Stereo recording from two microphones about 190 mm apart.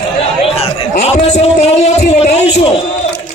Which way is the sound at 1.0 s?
35° left (ahead or behind).